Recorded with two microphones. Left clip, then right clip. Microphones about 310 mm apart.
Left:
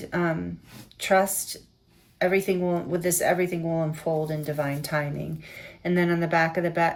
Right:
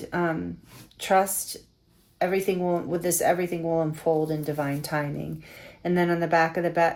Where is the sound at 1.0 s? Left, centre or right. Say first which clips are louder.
Even; centre.